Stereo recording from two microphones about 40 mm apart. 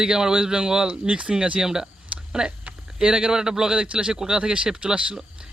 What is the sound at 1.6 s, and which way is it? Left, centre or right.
A man's voice, centre.